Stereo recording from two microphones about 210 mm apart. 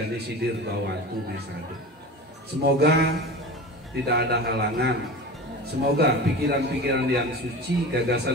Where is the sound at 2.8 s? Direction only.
50° right (ahead or behind).